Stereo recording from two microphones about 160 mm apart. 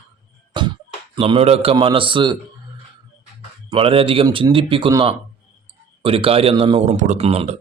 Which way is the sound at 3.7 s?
35° right (ahead or behind).